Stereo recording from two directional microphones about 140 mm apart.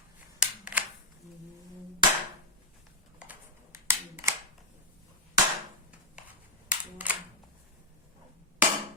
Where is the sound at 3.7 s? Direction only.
20° right (ahead or behind).